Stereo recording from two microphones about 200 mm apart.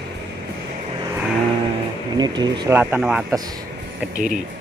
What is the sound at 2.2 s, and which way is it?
Speech, 20° right (ahead or behind).